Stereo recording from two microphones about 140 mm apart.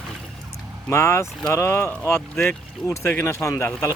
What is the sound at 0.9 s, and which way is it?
Speech, 20° left (ahead or behind).